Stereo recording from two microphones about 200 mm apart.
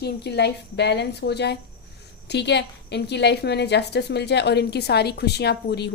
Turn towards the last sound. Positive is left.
turn(degrees=55)  # may be behind; listen again after turning